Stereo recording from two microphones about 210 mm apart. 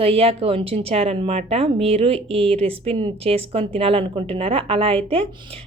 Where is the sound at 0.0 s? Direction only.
25° right (ahead or behind).